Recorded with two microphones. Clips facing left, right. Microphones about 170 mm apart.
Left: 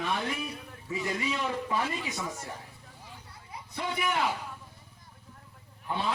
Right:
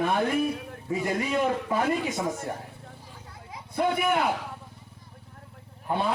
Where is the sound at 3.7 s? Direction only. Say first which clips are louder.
Right 8 dB; 55° right (ahead or behind).